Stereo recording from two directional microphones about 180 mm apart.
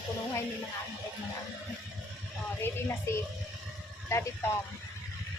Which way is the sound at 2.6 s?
15° left (ahead or behind).